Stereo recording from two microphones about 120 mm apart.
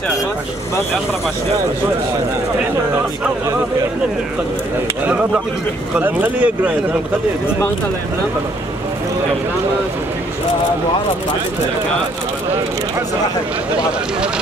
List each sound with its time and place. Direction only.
5.0 s speech: 10° right (ahead or behind)